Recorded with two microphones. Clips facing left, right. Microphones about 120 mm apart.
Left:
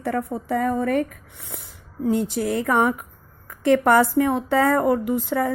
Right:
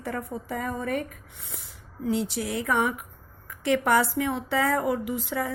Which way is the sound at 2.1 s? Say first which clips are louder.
Left 6 dB; 50° left (ahead or behind).